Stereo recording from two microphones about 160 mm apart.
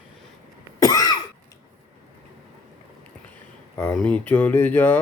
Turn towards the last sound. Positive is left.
turn(degrees=10)  # may be behind; listen again after turning